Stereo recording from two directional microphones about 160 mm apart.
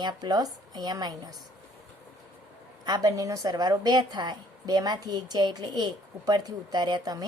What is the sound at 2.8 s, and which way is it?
A woman's voice, 25° right (ahead or behind).